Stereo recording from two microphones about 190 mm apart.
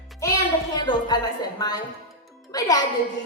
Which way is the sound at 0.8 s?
20° left (ahead or behind).